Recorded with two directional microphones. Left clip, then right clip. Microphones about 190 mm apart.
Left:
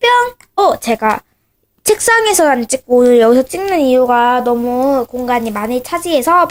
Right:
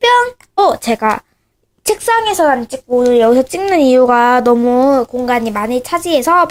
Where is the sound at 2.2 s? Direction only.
40° left (ahead or behind).